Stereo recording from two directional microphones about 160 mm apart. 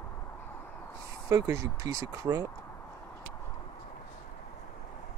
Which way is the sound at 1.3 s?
20° right (ahead or behind).